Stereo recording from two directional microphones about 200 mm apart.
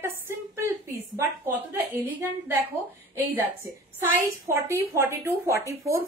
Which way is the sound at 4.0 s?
10° right (ahead or behind).